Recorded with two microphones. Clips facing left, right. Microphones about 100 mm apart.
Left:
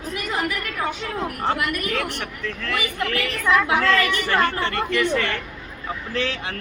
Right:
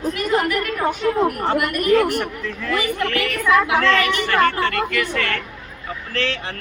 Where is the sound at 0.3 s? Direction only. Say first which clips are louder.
Right 5 dB; 50° right (ahead or behind).